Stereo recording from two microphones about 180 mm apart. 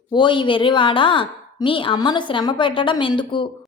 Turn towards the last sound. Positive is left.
turn(degrees=25)  # may be behind; listen again after turning